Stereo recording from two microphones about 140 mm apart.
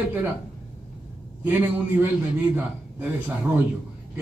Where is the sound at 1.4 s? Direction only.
10° right (ahead or behind).